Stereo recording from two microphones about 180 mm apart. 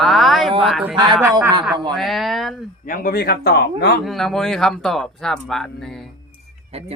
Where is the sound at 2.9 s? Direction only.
55° left (ahead or behind).